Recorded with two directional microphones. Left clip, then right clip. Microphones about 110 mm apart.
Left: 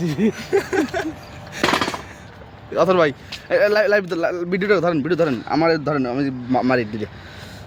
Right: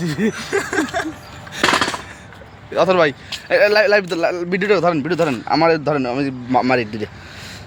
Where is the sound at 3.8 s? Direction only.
Centre (ahead or behind).